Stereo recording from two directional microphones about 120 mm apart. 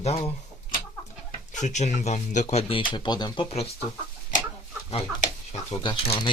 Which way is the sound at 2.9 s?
35° left (ahead or behind).